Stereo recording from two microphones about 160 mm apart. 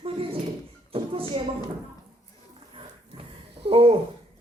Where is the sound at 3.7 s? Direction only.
35° right (ahead or behind).